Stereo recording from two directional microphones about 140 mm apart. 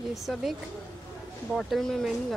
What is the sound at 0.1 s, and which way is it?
Speech, centre (ahead or behind).